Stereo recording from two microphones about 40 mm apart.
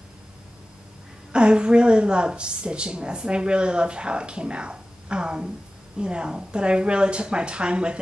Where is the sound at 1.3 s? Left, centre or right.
Right.